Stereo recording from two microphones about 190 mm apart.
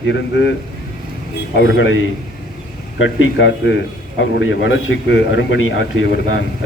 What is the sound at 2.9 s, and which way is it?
A man's voice, 80° left.